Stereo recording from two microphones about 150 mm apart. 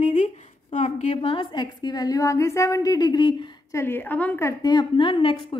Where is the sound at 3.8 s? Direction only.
15° left (ahead or behind).